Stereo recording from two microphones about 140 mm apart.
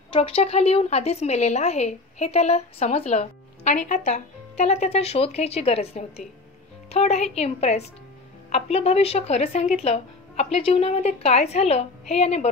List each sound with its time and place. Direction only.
0.1 s a woman's voice: 40° left (ahead or behind)